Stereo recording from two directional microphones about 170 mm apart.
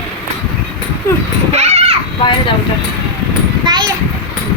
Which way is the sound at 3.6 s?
25° right (ahead or behind).